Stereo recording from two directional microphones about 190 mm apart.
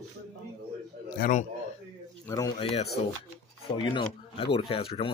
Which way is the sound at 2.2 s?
20° left (ahead or behind).